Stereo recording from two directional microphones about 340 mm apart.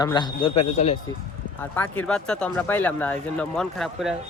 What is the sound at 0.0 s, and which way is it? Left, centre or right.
Speech, centre.